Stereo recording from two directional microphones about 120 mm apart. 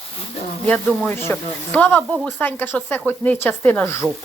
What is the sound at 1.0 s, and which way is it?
A woman's voice, 15° left (ahead or behind).